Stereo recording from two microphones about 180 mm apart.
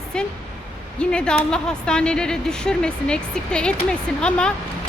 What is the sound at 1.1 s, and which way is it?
Speech, 5° left (ahead or behind).